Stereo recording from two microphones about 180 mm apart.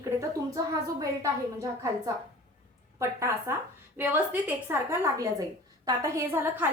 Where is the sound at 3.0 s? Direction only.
15° right (ahead or behind).